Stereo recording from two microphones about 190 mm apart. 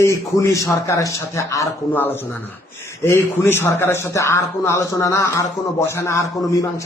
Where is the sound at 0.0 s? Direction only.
15° left (ahead or behind).